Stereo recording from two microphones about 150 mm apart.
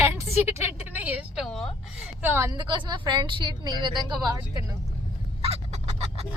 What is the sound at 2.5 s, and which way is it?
Speech, 30° right (ahead or behind).